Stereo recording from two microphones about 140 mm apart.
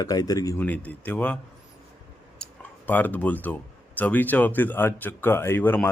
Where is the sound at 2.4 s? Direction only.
10° left (ahead or behind).